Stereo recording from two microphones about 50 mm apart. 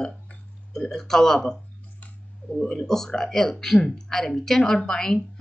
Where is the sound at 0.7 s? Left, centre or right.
Centre.